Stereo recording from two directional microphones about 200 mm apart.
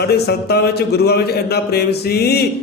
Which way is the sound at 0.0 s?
55° left (ahead or behind).